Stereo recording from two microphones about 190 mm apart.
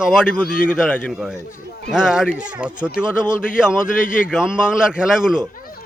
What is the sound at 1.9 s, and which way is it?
Speech, 5° right (ahead or behind).